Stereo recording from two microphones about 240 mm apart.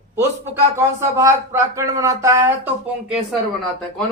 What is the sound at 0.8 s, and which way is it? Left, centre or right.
A man's voice, centre.